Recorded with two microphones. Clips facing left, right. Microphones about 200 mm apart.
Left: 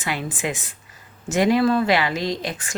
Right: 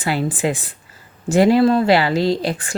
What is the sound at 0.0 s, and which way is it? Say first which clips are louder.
Speech: right 7 dB; 35° right (ahead or behind).